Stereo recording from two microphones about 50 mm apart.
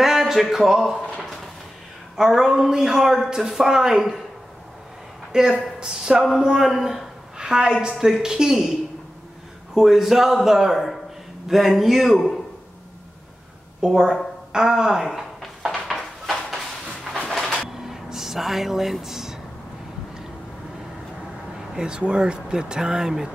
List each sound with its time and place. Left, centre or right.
0.0 s speech: centre
1.0 s a sound: centre
2.1 s speech: centre
5.3 s speech: centre
7.3 s a woman's voice: centre
9.8 s speech: centre
13.7 s a woman's voice: centre
14.5 s a sound: centre
17.3 s pigeon: centre
17.6 s a sound: centre
21.5 s speech: centre